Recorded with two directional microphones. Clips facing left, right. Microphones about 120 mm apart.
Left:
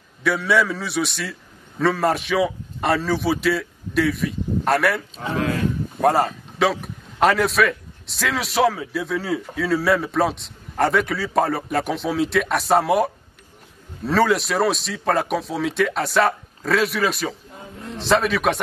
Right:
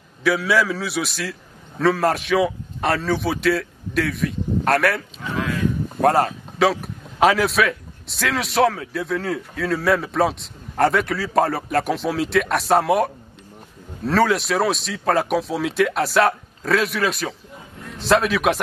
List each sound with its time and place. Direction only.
0.2 s a man's voice: centre (ahead or behind)
5.2 s speech: 35° left (ahead or behind)
5.9 s a man's voice: centre (ahead or behind)